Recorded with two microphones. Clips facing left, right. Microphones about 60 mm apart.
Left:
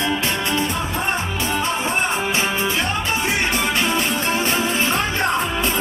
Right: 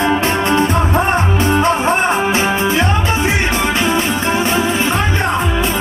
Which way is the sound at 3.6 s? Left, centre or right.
Centre.